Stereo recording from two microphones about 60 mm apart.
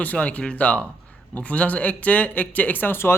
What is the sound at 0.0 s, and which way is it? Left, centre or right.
Speech, left.